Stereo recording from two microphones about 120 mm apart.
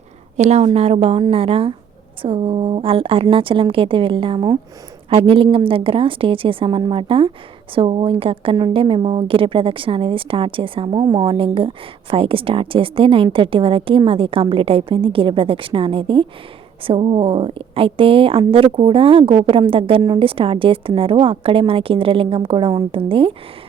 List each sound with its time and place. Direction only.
0.3 s a woman's voice: 70° right (ahead or behind); by 23.3 s 50° right (ahead or behind)